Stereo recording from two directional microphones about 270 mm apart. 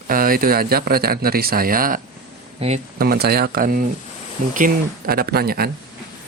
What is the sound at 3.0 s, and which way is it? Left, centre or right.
A man's voice, right.